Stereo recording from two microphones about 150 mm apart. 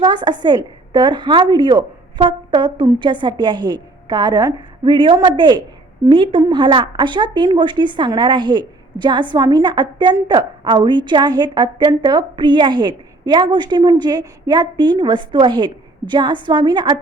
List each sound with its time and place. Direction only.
0.0 s a woman's voice: 30° right (ahead or behind)